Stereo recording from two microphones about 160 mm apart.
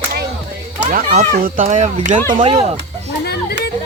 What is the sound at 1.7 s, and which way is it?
Speech, 50° right (ahead or behind).